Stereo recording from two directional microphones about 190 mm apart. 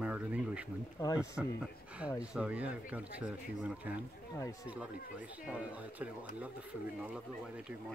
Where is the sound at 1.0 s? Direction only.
15° left (ahead or behind).